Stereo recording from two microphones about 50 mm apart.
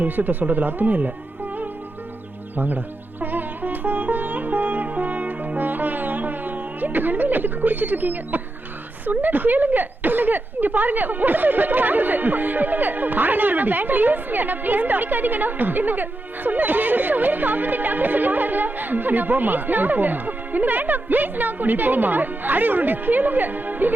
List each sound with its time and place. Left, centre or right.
0.0 s a woman's voice: right
2.6 s music: right
9.0 s a woman's voice: right